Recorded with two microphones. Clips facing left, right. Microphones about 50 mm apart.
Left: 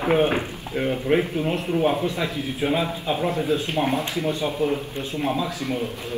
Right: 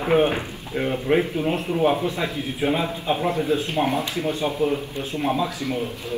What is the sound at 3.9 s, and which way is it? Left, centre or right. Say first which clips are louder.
Speech: even; left.